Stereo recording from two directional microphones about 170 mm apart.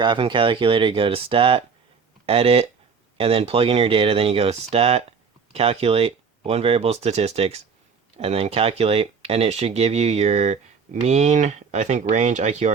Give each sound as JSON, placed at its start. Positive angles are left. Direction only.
{"t": 0.0, "sound": "speech", "side_deg": -30}